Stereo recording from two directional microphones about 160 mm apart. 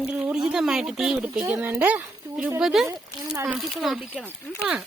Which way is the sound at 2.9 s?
15° right (ahead or behind).